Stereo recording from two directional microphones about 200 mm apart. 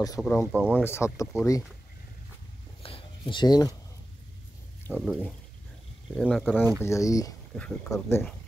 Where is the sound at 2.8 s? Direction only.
25° left (ahead or behind).